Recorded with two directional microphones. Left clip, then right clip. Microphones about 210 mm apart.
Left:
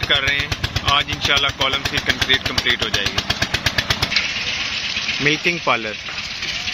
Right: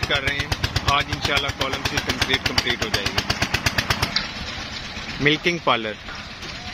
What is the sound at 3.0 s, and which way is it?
Vehicle, 45° left (ahead or behind).